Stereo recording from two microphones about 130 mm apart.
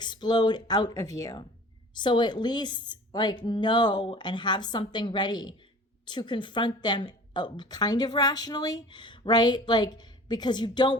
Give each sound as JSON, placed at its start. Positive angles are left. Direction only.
{"t": 0.0, "sound": "a woman's voice", "side_deg": 35}